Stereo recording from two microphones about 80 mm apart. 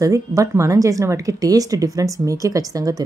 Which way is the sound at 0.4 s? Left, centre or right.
Right.